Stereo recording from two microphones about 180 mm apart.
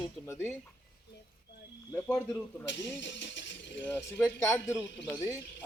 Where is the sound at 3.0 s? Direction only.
80° left.